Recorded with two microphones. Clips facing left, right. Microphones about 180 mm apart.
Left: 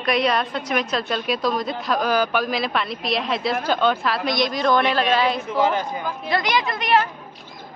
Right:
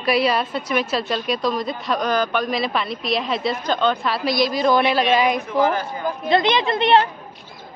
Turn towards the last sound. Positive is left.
turn(degrees=-25)  # may be behind; listen again after turning